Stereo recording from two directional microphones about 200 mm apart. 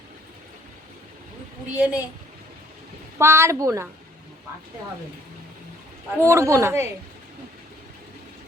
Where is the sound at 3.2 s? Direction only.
10° right (ahead or behind).